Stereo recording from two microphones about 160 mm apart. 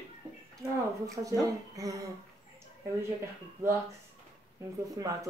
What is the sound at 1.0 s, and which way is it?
Speech, 20° right (ahead or behind).